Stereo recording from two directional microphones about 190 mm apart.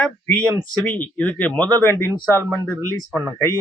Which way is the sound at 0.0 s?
5° left (ahead or behind).